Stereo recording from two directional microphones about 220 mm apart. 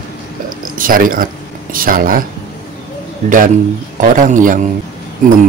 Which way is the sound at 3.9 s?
35° right (ahead or behind).